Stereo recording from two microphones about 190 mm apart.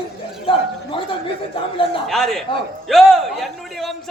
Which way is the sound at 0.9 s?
25° left (ahead or behind).